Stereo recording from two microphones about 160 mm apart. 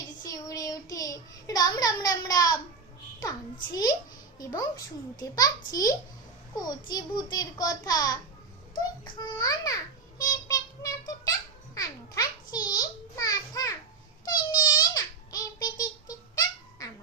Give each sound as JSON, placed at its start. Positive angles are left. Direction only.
{"t": 0.2, "sound": "child singing", "side_deg": 20}
{"t": 3.2, "sound": "a child's voice", "side_deg": 20}
{"t": 14.3, "sound": "babbling", "side_deg": 25}